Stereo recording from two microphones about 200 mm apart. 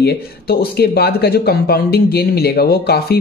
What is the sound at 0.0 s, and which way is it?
Speech, 50° left (ahead or behind).